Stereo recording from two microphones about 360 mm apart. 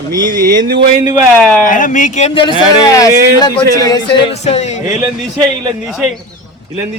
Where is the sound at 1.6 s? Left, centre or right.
Left.